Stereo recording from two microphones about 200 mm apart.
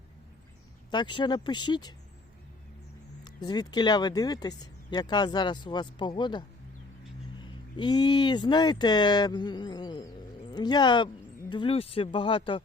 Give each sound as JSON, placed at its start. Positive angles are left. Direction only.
{"t": 0.9, "sound": "speech", "side_deg": 20}
{"t": 3.2, "sound": "speech", "side_deg": 20}
{"t": 7.8, "sound": "speech", "side_deg": 20}